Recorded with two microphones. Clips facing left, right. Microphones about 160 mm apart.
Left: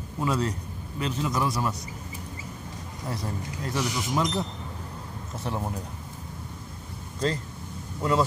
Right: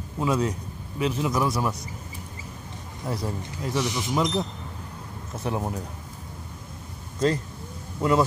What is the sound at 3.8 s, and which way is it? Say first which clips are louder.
Speech: right 1 dB; 20° right (ahead or behind).